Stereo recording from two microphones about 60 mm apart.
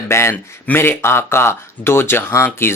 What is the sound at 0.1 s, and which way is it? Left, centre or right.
Speech, left.